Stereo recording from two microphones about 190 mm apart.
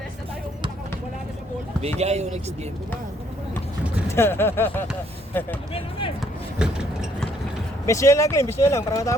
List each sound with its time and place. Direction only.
2.0 s speech: 35° right (ahead or behind)
4.1 s speech: 10° left (ahead or behind)
6.6 s vehicle: 5° right (ahead or behind)
7.9 s speech: 15° left (ahead or behind)